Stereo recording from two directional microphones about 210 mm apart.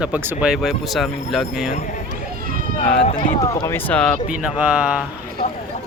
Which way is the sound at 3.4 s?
15° left (ahead or behind).